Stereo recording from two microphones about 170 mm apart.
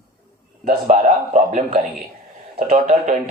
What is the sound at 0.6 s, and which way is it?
Speech, 45° right (ahead or behind).